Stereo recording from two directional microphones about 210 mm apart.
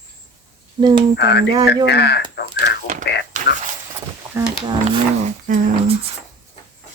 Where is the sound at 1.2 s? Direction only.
50° left (ahead or behind).